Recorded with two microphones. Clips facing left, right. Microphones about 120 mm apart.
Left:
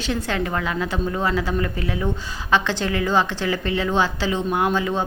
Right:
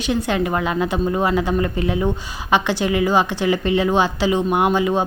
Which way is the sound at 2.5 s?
15° right (ahead or behind).